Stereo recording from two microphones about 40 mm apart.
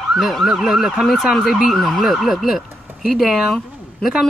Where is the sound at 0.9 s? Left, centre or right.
Centre.